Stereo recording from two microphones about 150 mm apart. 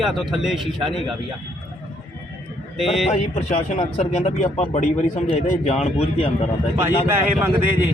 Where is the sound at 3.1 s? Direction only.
50° left (ahead or behind).